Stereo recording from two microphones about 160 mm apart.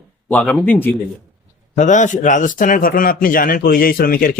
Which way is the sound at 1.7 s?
50° left (ahead or behind).